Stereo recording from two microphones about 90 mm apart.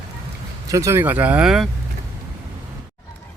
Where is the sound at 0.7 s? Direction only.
35° right (ahead or behind).